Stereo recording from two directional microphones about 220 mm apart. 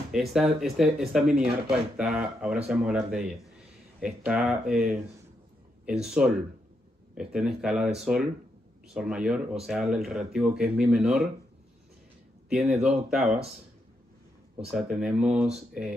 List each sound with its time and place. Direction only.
0.1 s speech: centre (ahead or behind)
6.0 s speech: 5° right (ahead or behind)
12.4 s speech: 5° right (ahead or behind)
14.7 s speech: 5° right (ahead or behind)